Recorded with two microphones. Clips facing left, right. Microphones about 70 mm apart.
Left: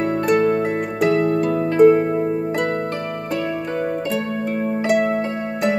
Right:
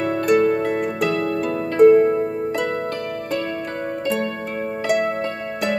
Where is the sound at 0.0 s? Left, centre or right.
Centre.